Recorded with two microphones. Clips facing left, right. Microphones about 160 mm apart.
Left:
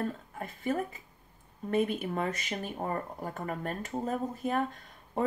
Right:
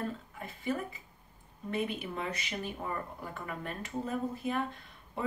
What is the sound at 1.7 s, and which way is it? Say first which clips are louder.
Speech: left 5 dB; 45° left (ahead or behind).